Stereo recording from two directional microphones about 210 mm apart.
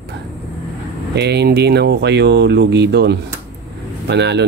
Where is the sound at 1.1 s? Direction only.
55° right (ahead or behind).